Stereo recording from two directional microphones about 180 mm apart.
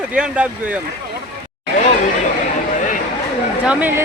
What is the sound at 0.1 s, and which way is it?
Speech, 5° right (ahead or behind).